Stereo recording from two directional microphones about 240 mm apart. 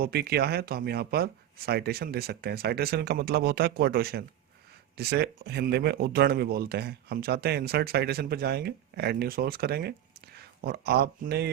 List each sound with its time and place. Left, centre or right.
0.0 s speech: right